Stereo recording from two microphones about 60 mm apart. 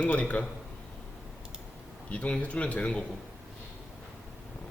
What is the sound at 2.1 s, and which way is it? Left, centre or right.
Speech, left.